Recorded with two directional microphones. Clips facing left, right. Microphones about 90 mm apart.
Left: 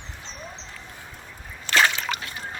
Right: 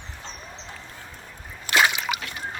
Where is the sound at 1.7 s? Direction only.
15° right (ahead or behind).